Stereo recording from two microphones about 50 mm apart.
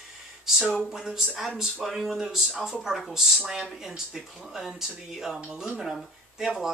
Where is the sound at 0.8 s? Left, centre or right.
Centre.